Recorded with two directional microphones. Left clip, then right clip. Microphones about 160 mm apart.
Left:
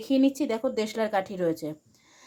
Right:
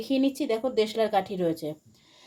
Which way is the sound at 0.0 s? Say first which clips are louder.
Left 2 dB; 20° left (ahead or behind).